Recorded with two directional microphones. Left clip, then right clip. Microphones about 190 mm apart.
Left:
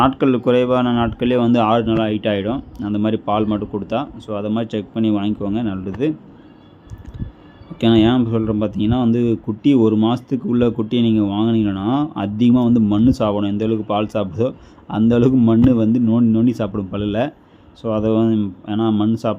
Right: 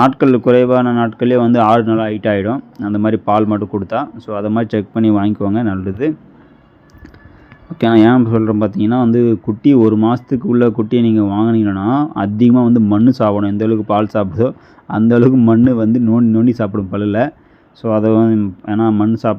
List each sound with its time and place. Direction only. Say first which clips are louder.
0.0 s speech: right 4 dB; 20° right (ahead or behind)
7.8 s speech: right 5 dB; 25° right (ahead or behind)